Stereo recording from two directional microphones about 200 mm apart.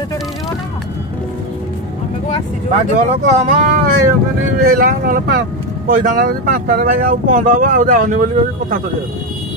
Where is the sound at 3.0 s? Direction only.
35° right (ahead or behind).